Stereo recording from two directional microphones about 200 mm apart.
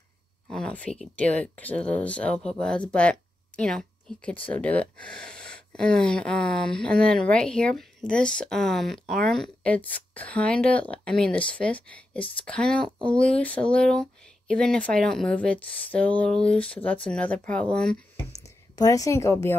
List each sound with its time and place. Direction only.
0.5 s speech: 5° left (ahead or behind)
18.4 s speech: 15° left (ahead or behind)